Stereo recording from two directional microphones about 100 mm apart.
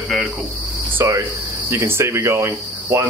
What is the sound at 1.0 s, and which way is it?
Cricket, 30° right (ahead or behind).